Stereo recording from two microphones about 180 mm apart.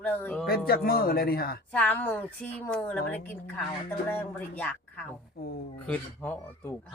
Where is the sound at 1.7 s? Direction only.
10° left (ahead or behind).